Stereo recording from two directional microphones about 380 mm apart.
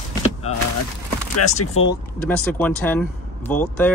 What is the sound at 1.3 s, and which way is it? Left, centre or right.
Speech, left.